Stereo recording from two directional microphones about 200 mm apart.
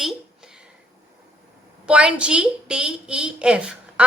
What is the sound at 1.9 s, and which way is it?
A woman's voice, 5° right (ahead or behind).